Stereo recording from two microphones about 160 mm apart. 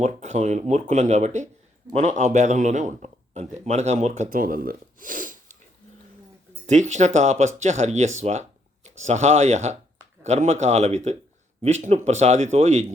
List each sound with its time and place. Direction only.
0.0 s a man's voice: 45° right (ahead or behind)
6.7 s a man's voice: 45° right (ahead or behind)